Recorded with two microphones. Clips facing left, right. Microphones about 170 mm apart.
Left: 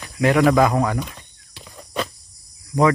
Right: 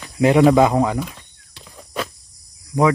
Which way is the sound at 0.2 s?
25° right (ahead or behind).